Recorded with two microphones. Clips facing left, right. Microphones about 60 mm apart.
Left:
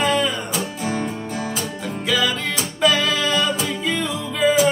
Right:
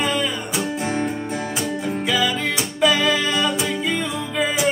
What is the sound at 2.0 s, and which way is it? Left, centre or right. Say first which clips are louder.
Music: left 1 dB; centre.